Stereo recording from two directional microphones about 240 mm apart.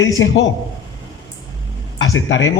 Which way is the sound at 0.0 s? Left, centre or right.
Left.